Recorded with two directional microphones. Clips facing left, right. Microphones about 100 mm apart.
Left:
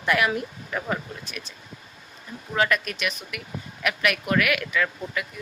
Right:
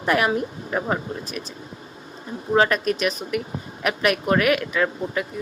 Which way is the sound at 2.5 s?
35° right (ahead or behind).